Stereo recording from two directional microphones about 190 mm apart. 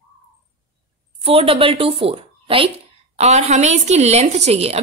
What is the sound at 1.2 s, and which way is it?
A woman's voice, 30° right (ahead or behind).